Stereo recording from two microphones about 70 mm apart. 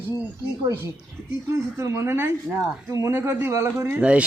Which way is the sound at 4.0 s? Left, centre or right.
Centre.